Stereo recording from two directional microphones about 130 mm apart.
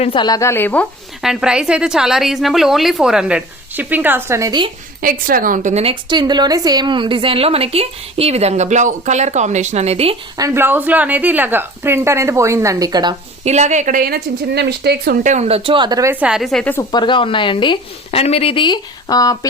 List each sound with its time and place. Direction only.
0.0 s a woman's voice: 45° left (ahead or behind)
0.3 s a woman's voice: 25° left (ahead or behind)
1.2 s a woman's voice: 5° right (ahead or behind); by 4.6 s 25° right (ahead or behind)
5.0 s a woman's voice: 90° right
5.8 s a woman's voice: 40° right (ahead or behind)
10.3 s a woman's voice: 20° right (ahead or behind)
13.4 s speech: 60° right (ahead or behind); by 14.0 s 80° right
15.2 s a woman's voice: 65° right (ahead or behind); by 16.1 s 30° right (ahead or behind)
16.2 s a woman's voice: 5° right (ahead or behind)
16.9 s a woman's voice: 35° left (ahead or behind)